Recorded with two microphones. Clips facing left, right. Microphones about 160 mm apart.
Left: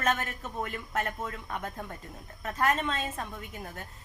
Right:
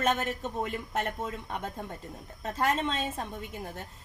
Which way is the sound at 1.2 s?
25° right (ahead or behind).